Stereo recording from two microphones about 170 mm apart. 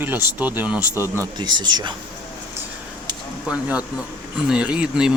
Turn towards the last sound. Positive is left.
turn(degrees=-5)  # may be behind; listen again after turning